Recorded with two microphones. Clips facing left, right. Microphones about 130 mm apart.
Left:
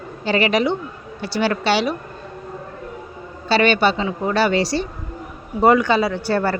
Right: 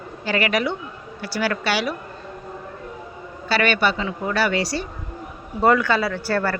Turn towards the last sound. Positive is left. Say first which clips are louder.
# left 3 dB
turn(degrees=20)  # may be behind; listen again after turning